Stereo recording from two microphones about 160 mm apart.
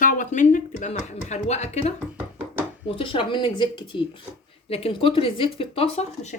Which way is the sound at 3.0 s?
30° left (ahead or behind).